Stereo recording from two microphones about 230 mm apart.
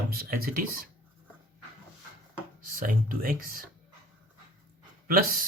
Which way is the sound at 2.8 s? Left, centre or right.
Right.